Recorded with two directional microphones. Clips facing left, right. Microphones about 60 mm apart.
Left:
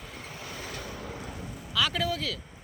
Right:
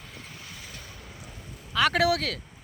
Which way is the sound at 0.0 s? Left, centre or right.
Centre.